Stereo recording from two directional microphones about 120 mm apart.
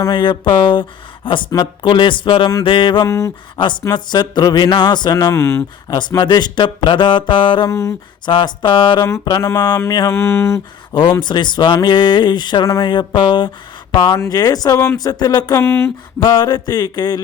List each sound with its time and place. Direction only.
0.0 s speech: 40° left (ahead or behind)
3.1 s speech: 25° left (ahead or behind)
3.6 s speech: 40° left (ahead or behind)
5.3 s speech: 25° left (ahead or behind)
5.9 s speech: 35° left (ahead or behind)
7.7 s speech: 25° left (ahead or behind)
8.2 s speech: 40° left (ahead or behind); by 10.6 s 20° left (ahead or behind)
11.2 s speech: 40° left (ahead or behind)
15.6 s speech: 20° left (ahead or behind)
16.2 s speech: 35° left (ahead or behind)